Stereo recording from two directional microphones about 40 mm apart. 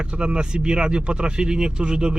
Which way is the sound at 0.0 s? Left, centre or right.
Right.